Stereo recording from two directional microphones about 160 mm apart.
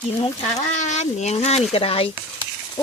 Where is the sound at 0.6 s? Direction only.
45° left (ahead or behind).